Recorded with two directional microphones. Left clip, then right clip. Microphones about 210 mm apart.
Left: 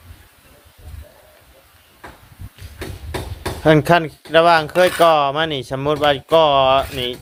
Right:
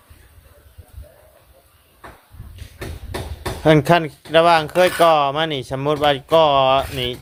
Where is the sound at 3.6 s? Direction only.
5° right (ahead or behind).